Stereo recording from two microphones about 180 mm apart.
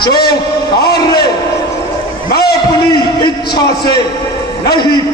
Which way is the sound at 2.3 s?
60° left (ahead or behind).